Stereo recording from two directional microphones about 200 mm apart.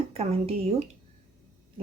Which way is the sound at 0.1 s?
30° right (ahead or behind).